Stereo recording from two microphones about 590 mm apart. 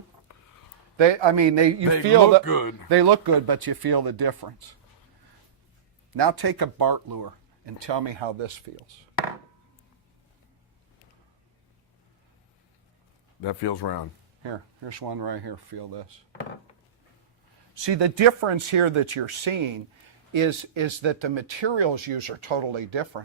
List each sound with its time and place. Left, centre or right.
0.3 s a sound: left
0.9 s speech: right
2.4 s speech: left
2.9 s speech: right
6.1 s speech: right
13.4 s speech: left
14.8 s speech: right
17.7 s speech: right